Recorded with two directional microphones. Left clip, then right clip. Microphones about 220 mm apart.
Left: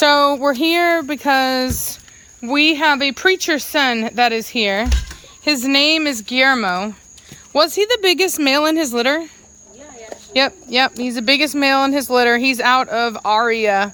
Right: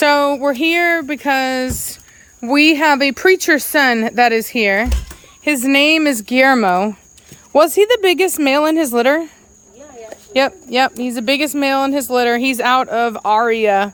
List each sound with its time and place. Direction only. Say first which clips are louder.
0.0 s speech: even; 15° right (ahead or behind)
2.4 s speech: right 3 dB; 20° right (ahead or behind)
10.3 s speech: right 1 dB; 15° right (ahead or behind)